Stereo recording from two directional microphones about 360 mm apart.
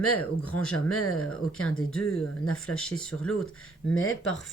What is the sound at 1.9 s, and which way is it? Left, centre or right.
Speech, centre.